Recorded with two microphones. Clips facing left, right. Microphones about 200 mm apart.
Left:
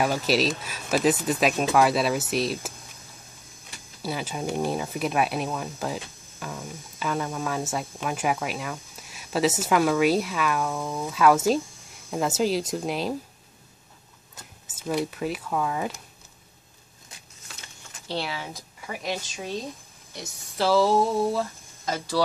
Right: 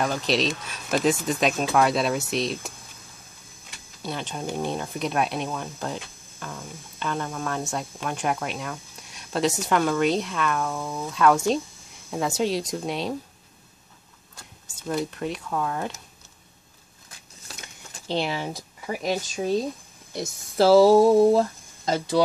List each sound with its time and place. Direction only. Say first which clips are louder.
0.0 s speech: left 1 dB; 5° left (ahead or behind)
4.0 s speech: left 1 dB; 5° left (ahead or behind)
14.8 s speech: left 1 dB; 5° left (ahead or behind)
17.5 s keys jangling: right 4 dB; 40° right (ahead or behind)
18.0 s speech: right 5 dB; 20° right (ahead or behind)
18.9 s speech: right 5 dB; 40° right (ahead or behind)
20.2 s a sound: right 7 dB; 40° right (ahead or behind)
21.9 s speech: right 5 dB; 20° right (ahead or behind)